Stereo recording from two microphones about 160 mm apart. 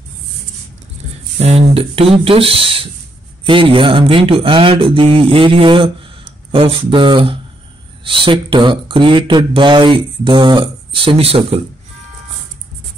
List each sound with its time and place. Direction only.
1.4 s speech: 40° right (ahead or behind)